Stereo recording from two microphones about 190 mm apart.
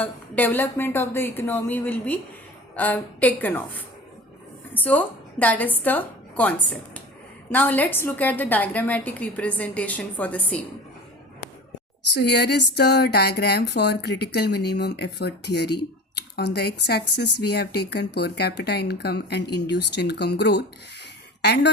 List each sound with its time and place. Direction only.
0.0 s a woman's voice: 10° left (ahead or behind)
4.7 s a woman's voice: 10° left (ahead or behind)
12.1 s speech: 60° left (ahead or behind)